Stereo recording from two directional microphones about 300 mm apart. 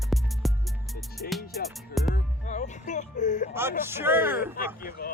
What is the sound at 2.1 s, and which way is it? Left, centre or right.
Music, left.